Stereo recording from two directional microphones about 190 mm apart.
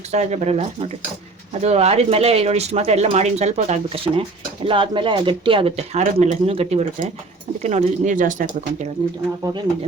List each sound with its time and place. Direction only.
0.1 s speech: 35° right (ahead or behind)